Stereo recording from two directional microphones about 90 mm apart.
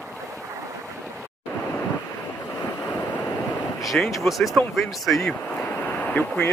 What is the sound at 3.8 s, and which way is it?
Speech, centre (ahead or behind).